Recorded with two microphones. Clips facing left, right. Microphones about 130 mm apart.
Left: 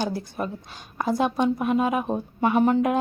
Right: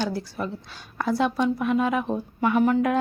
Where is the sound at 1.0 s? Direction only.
20° left (ahead or behind).